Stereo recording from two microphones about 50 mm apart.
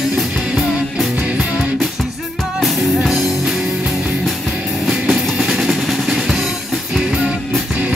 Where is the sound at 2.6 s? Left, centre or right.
Centre.